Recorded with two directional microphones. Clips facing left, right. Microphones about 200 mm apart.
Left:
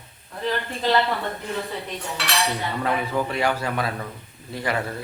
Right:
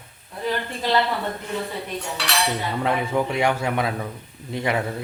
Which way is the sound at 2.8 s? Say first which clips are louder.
Right 2 dB; 20° right (ahead or behind).